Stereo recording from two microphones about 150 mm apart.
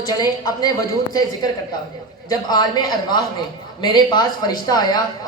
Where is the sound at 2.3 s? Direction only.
25° left (ahead or behind).